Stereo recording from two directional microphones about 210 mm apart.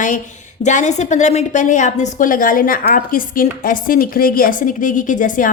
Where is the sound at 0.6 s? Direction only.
35° left (ahead or behind).